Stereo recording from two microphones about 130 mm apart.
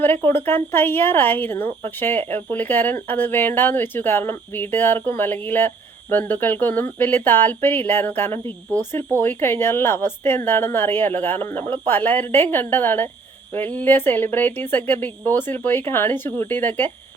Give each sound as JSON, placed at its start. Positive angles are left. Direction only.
{"t": 0.0, "sound": "speech", "side_deg": 15}